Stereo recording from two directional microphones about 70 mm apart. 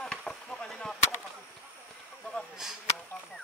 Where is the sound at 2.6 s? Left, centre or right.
Centre.